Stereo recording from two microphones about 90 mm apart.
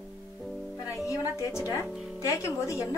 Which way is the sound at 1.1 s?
35° left (ahead or behind).